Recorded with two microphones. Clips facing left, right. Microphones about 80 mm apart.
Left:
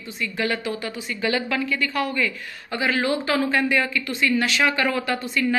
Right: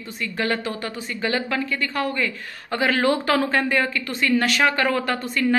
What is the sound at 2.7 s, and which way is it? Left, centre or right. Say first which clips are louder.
Speech: right 3 dB; right.